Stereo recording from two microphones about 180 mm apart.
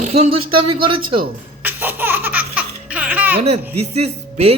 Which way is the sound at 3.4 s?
35° right (ahead or behind).